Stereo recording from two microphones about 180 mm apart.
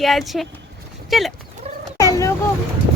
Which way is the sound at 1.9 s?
20° left (ahead or behind).